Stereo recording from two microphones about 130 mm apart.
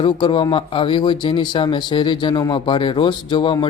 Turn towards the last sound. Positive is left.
turn(degrees=40)  # may be behind; listen again after turning